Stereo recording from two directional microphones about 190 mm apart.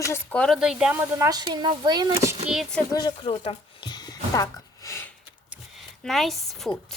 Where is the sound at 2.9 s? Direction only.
25° left (ahead or behind).